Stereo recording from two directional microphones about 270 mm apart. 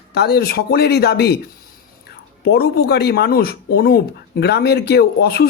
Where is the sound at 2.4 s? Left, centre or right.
Left.